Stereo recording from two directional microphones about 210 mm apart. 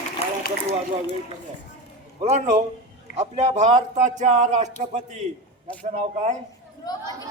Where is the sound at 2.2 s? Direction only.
35° right (ahead or behind).